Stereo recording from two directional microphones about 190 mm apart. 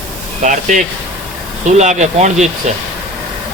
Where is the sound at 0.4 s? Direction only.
40° right (ahead or behind).